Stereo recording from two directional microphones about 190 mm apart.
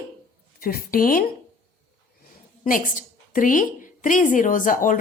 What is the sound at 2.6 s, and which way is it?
A woman's voice, 45° left (ahead or behind).